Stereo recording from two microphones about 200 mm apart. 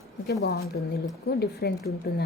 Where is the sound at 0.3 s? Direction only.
50° left (ahead or behind).